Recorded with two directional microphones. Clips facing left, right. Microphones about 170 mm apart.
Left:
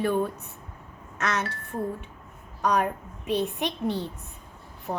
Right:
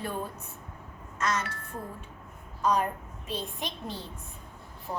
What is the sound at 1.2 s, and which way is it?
Speech, 65° left (ahead or behind).